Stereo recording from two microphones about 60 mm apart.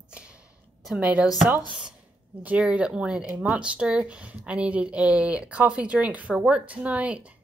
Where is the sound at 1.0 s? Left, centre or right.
Right.